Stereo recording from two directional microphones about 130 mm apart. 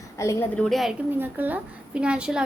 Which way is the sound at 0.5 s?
5° left (ahead or behind).